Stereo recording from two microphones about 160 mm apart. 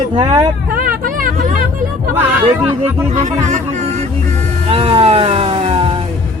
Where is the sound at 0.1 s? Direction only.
35° right (ahead or behind).